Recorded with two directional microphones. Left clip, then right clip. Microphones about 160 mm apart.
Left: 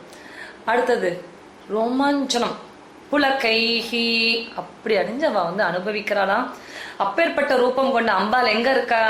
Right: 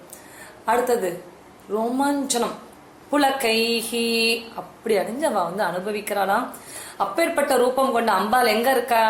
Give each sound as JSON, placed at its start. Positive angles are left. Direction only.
{"t": 0.6, "sound": "speech", "side_deg": -30}